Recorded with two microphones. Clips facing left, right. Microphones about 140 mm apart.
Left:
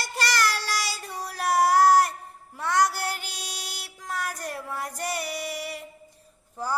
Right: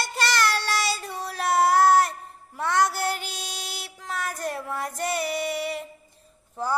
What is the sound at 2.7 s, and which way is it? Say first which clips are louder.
Mantra: right 1 dB; 55° right (ahead or behind).